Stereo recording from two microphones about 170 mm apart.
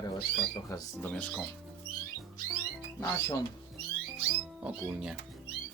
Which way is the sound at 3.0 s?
20° left (ahead or behind).